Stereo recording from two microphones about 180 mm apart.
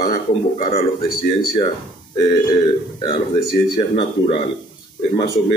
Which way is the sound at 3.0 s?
25° left (ahead or behind).